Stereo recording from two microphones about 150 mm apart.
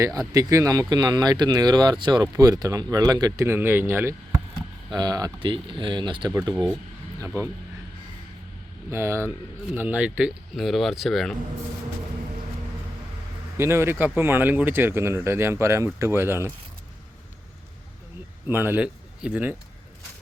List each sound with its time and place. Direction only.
0.3 s speech: 20° right (ahead or behind)
4.9 s speech: 25° right (ahead or behind)
7.2 s speech: 20° right (ahead or behind)
8.9 s speech: 20° right (ahead or behind); by 11.3 s centre (ahead or behind)
13.6 s speech: 15° right (ahead or behind)
18.4 s speech: 15° right (ahead or behind)